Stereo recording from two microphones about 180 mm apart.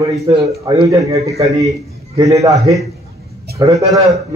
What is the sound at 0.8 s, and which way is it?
Speech, 20° right (ahead or behind).